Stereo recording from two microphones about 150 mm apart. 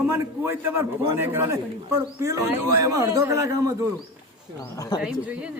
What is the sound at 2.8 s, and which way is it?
Speech, 20° right (ahead or behind).